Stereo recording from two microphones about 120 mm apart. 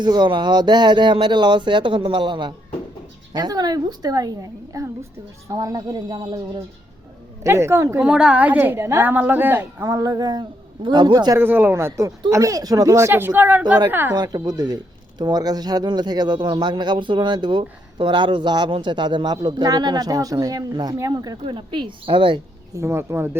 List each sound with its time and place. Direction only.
0.0 s speech: 40° right (ahead or behind)
7.4 s speech: 25° right (ahead or behind)
8.0 s a woman's voice: 10° right (ahead or behind); by 11.3 s 35° right (ahead or behind)
11.3 s a woman's voice: 15° right (ahead or behind)
14.2 s speech: 35° right (ahead or behind)
21.4 s a woman's voice: 45° right (ahead or behind)
22.7 s speech: 25° right (ahead or behind)